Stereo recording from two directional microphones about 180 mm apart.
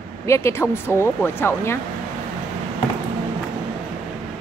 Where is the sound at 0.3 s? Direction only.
15° left (ahead or behind).